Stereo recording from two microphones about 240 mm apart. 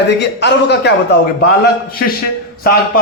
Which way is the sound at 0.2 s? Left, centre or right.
Left.